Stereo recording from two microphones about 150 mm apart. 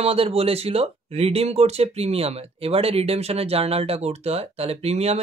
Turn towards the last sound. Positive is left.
turn(degrees=-45)  # may be behind; listen again after turning